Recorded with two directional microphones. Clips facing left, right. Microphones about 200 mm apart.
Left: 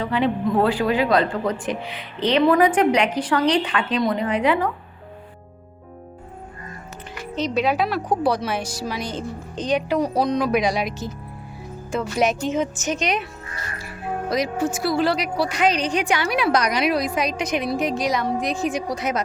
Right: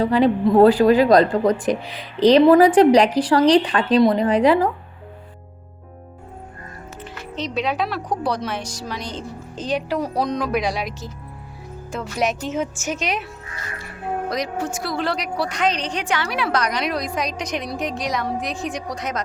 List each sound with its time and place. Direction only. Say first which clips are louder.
0.0 s speech: right 5 dB; 35° right (ahead or behind)
7.3 s a woman's voice: left 3 dB; centre (ahead or behind)
9.6 s a woman's voice: left 2 dB; 5° right (ahead or behind)
14.3 s a woman's voice: left 6 dB; 5° left (ahead or behind)